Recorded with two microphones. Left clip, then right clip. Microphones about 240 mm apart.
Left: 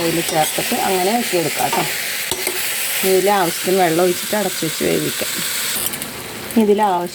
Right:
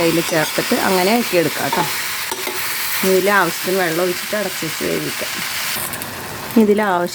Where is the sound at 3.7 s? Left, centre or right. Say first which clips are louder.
Left 4 dB; centre.